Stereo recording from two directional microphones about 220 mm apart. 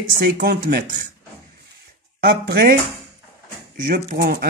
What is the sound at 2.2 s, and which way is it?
Speech, 50° right (ahead or behind).